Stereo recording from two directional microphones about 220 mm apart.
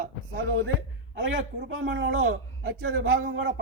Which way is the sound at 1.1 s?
55° right (ahead or behind).